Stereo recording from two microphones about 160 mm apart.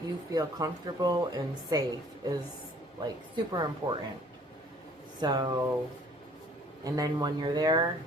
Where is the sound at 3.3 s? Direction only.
25° right (ahead or behind).